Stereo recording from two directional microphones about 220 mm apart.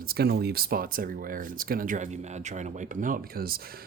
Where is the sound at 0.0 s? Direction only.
45° right (ahead or behind).